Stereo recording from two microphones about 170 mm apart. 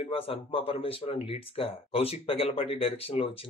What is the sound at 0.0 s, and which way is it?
Speech, 35° left (ahead or behind).